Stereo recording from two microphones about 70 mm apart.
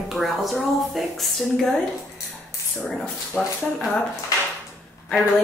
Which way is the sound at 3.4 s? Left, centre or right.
Centre.